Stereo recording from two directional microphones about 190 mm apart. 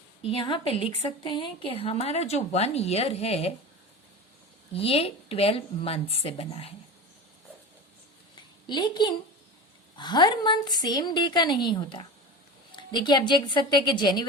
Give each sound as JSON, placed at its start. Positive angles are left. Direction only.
{"t": 0.2, "sound": "a woman's voice", "side_deg": 30}
{"t": 4.7, "sound": "a woman's voice", "side_deg": 30}
{"t": 8.6, "sound": "a woman's voice", "side_deg": 25}